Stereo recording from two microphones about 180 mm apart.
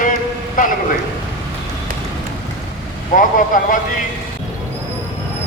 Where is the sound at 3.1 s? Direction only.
50° left (ahead or behind).